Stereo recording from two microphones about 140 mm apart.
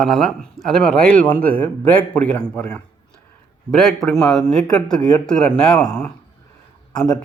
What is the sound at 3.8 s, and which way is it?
Speech, centre (ahead or behind).